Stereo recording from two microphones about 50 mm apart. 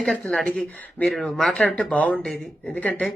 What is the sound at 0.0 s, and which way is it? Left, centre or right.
Speech, centre.